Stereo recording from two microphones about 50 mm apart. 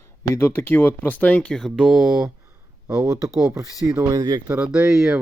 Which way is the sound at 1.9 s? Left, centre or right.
Centre.